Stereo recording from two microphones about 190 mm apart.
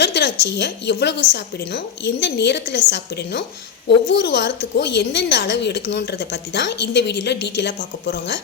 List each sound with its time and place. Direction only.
0.0 s a woman's voice: 60° left (ahead or behind)